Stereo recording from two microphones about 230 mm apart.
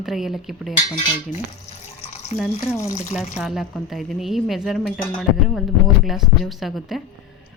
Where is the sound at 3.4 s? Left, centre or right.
Centre.